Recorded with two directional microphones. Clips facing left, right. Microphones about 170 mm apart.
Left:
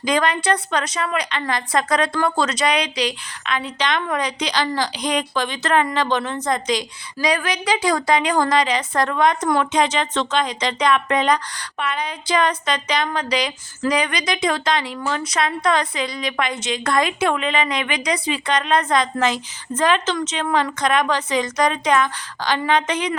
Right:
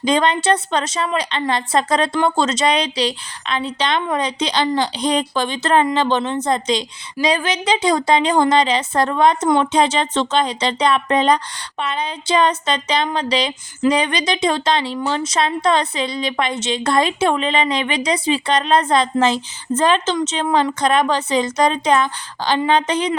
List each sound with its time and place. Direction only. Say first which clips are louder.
0.0 s speech: right 3 dB; 25° right (ahead or behind)